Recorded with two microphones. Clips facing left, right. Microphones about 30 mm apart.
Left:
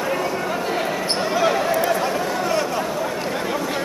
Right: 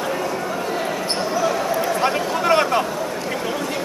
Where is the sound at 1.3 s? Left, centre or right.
Left.